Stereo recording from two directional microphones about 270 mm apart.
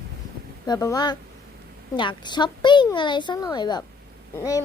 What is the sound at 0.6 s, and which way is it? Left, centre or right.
A woman's voice, centre.